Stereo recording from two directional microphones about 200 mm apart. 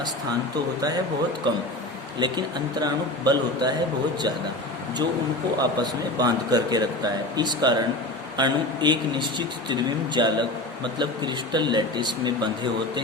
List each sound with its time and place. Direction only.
1.5 s a man's voice: 25° right (ahead or behind)
5.5 s a man's voice: 20° right (ahead or behind)